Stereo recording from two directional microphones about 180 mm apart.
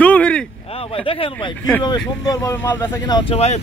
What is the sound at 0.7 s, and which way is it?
Speech, 30° left (ahead or behind).